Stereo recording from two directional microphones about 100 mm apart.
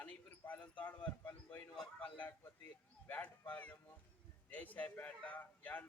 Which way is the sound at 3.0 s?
15° left (ahead or behind).